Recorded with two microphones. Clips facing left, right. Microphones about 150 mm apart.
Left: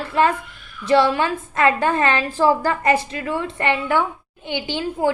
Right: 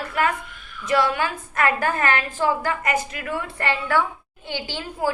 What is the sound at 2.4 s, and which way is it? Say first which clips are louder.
A woman's voice: left 5 dB; 35° left (ahead or behind).